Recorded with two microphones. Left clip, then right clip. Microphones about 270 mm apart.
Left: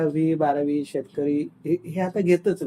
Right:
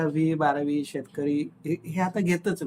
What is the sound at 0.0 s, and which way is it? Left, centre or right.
Speech, centre.